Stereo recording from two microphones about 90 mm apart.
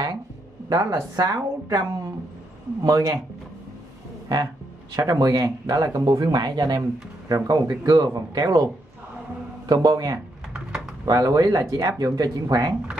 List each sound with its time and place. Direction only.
0.7 s speech: 40° right (ahead or behind)
4.9 s speech: 40° right (ahead or behind)
9.7 s speech: 45° right (ahead or behind)